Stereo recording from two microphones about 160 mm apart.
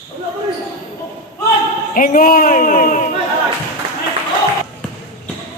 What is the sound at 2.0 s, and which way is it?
A man's voice, 60° left (ahead or behind).